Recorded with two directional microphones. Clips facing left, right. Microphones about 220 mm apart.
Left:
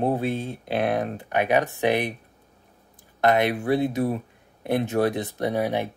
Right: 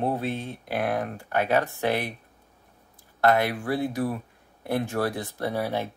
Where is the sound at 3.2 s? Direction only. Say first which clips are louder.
Left 2 dB; 20° left (ahead or behind).